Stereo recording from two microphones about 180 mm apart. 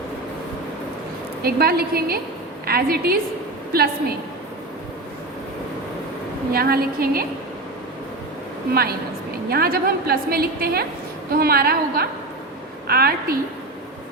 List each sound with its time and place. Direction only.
1.4 s a woman's voice: 55° right (ahead or behind)
6.5 s a woman's voice: 55° right (ahead or behind)
8.7 s a woman's voice: 60° right (ahead or behind)